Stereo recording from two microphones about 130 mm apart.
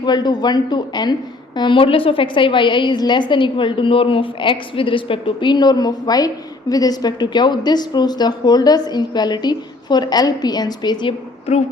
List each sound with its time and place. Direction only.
0.0 s a woman's voice: 35° left (ahead or behind)